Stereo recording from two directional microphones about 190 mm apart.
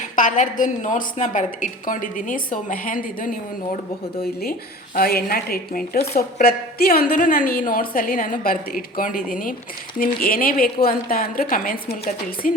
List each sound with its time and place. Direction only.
0.2 s a woman's voice: 45° left (ahead or behind)
4.9 s a woman's voice: 50° left (ahead or behind)